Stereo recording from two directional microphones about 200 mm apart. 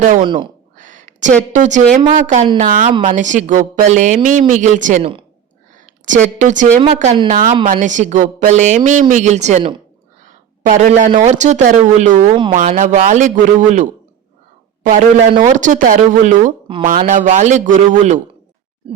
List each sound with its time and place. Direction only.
0.0 s a woman's voice: 40° right (ahead or behind)
10.2 s a sound: 40° right (ahead or behind)
11.2 s a woman's voice: 35° right (ahead or behind)
14.8 s a woman's voice: 40° right (ahead or behind)